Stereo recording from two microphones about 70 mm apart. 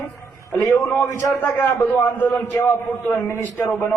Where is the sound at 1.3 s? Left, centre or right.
Left.